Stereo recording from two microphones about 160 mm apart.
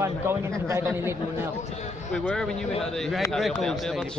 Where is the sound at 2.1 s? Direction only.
5° left (ahead or behind).